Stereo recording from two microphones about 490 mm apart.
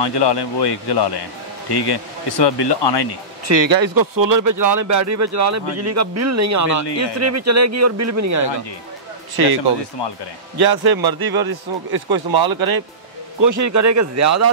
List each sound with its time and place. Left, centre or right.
0.0 s speech: left
3.4 s speech: right
10.6 s a man's voice: right